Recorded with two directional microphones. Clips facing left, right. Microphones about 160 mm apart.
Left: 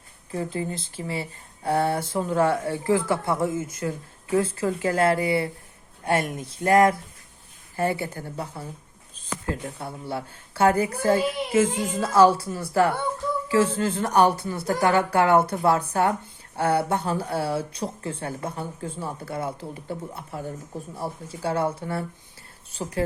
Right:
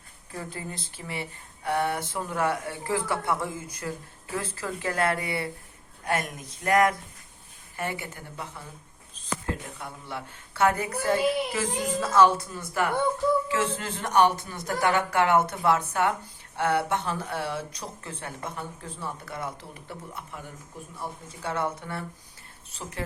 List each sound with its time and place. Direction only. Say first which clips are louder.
0.3 s a woman's voice: left 8 dB; 25° left (ahead or behind)